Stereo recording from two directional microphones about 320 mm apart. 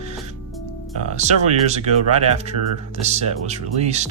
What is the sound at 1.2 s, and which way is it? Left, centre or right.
Speech, right.